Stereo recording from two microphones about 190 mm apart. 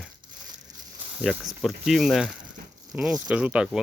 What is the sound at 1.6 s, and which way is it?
Speech, centre (ahead or behind).